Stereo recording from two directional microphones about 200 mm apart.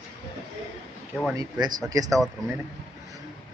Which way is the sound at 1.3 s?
20° right (ahead or behind).